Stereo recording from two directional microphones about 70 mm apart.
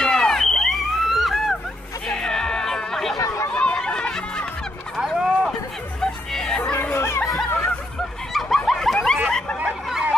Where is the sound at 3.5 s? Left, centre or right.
Centre.